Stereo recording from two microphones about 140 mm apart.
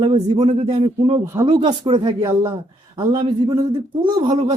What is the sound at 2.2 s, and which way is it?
Speech, 25° right (ahead or behind).